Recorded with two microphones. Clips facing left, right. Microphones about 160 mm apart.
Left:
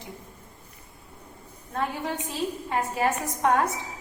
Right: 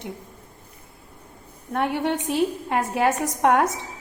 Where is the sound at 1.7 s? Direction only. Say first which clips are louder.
Right 6 dB; 70° right (ahead or behind).